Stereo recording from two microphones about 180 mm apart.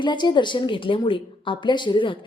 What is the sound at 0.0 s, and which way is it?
Speech, 25° left (ahead or behind).